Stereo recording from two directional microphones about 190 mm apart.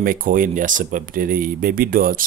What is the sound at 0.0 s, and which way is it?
Speech, 45° right (ahead or behind).